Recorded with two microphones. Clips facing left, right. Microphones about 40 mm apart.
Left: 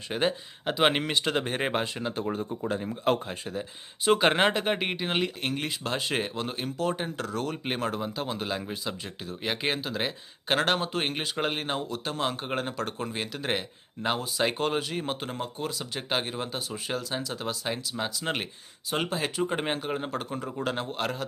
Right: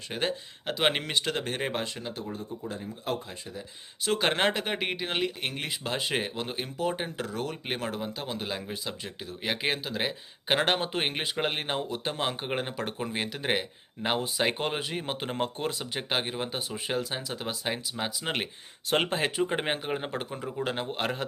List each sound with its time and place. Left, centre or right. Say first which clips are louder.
0.1 s speech: left 3 dB; centre
2.1 s speech: left 6 dB; left
3.2 s speech: left 6 dB; left
4.2 s speech: left 3 dB; centre
5.4 s speech: left 2 dB; centre
15.4 s speech: right 3 dB; right
15.8 s speech: even; centre
18.9 s speech: right 3 dB; right
19.4 s speech: even; centre
20.3 s speech: left 1 dB; centre